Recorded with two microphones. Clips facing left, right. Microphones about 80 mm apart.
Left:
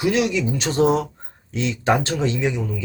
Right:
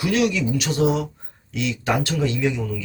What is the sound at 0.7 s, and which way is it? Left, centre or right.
Speech, left.